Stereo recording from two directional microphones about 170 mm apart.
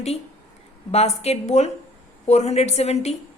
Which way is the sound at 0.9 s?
40° left (ahead or behind).